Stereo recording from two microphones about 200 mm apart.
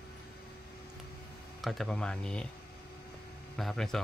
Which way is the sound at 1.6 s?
Centre (ahead or behind).